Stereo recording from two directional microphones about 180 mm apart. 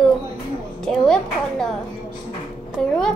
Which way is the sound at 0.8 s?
5° left (ahead or behind).